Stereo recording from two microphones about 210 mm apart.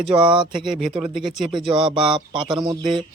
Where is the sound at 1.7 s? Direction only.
25° right (ahead or behind).